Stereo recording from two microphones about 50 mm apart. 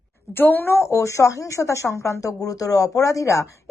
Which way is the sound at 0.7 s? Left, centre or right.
Left.